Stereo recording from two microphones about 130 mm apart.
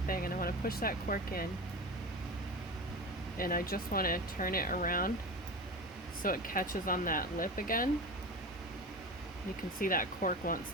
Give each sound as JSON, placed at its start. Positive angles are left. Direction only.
{"t": 0.1, "sound": "vehicle", "side_deg": 90}
{"t": 3.3, "sound": "speech", "side_deg": 90}
{"t": 6.2, "sound": "speech", "side_deg": 90}
{"t": 9.8, "sound": "speech", "side_deg": 90}